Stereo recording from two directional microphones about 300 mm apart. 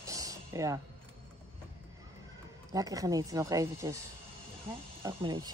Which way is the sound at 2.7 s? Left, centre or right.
Centre.